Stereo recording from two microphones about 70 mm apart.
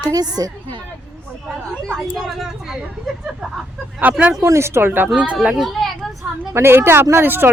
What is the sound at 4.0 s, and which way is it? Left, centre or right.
Speech, right.